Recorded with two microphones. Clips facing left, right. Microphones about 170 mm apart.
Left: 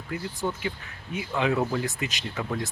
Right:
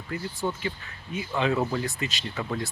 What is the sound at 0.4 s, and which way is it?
Speech, 5° left (ahead or behind).